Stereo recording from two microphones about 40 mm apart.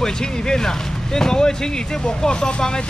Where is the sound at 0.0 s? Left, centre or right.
Centre.